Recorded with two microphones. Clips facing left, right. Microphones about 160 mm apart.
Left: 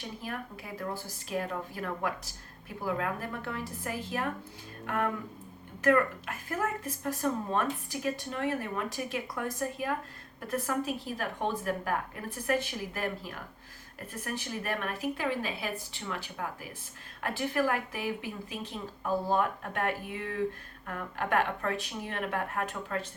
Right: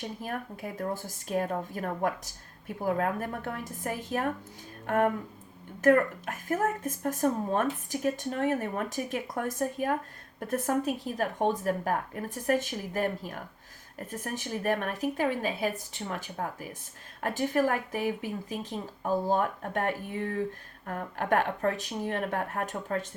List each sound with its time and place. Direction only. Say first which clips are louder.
0.2 s speech: right 3 dB; 45° right (ahead or behind)
5.8 s speech: right 3 dB; 45° right (ahead or behind)